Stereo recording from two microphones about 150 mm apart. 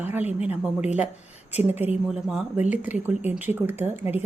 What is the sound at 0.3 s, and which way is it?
Speech, 45° left (ahead or behind).